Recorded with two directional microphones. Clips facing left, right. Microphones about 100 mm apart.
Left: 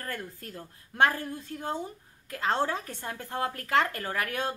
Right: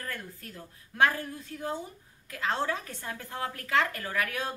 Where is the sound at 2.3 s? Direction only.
35° left (ahead or behind).